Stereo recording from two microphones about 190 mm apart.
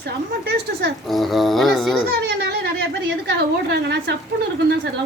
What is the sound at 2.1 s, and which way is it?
A woman's voice, 60° right (ahead or behind).